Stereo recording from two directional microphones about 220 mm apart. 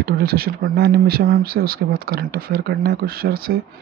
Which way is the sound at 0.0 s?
45° right (ahead or behind).